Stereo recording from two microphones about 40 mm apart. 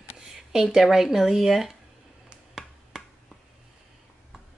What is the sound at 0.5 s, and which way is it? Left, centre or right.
Speech, centre.